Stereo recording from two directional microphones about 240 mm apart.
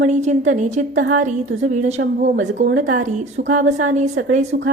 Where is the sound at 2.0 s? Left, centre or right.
Right.